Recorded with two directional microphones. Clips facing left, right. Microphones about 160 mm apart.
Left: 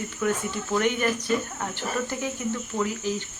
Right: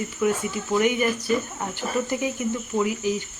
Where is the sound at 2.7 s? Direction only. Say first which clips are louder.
Right 5 dB; 15° right (ahead or behind).